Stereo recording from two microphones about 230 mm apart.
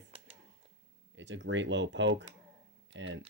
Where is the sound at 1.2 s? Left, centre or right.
Right.